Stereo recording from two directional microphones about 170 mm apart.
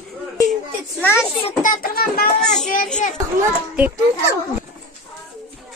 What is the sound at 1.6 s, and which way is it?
Speech, 55° left (ahead or behind).